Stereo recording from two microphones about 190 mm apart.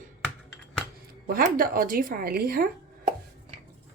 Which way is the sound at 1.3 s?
50° right (ahead or behind).